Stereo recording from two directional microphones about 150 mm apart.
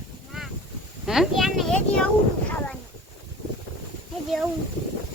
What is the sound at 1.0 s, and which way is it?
A woman's voice, centre (ahead or behind).